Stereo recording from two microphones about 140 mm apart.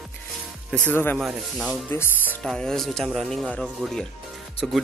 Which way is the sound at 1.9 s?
15° left (ahead or behind).